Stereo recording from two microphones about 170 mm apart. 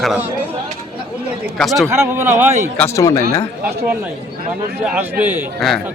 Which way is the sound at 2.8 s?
20° left (ahead or behind).